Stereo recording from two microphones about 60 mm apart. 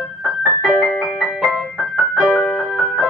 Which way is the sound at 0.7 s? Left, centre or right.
Centre.